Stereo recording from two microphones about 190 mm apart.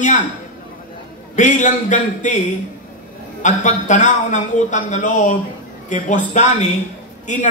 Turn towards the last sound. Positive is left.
turn(degrees=40)  # may be behind; listen again after turning